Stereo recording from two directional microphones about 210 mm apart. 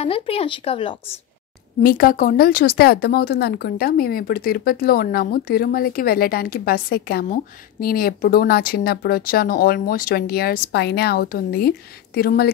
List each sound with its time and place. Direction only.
0.0 s speech: 30° left (ahead or behind)
1.8 s speech: 45° left (ahead or behind)